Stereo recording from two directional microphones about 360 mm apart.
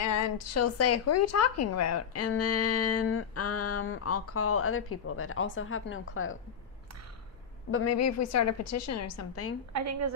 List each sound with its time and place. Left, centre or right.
0.0 s a woman's voice: left
7.7 s a woman's voice: left
9.7 s a woman's voice: right